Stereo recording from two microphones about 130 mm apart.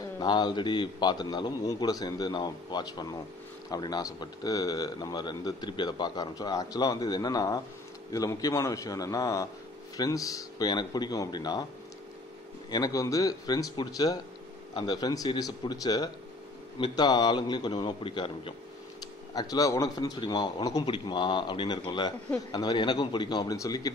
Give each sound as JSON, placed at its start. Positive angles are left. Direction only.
{"t": 0.2, "sound": "a man's voice", "side_deg": 35}
{"t": 12.7, "sound": "a man's voice", "side_deg": 25}
{"t": 19.3, "sound": "a man's voice", "side_deg": 30}